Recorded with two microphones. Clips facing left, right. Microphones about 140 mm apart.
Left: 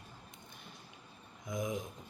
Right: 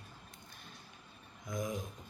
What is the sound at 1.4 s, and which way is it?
Speech, 20° left (ahead or behind).